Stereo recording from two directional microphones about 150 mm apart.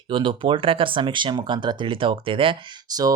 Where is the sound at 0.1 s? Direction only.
35° right (ahead or behind).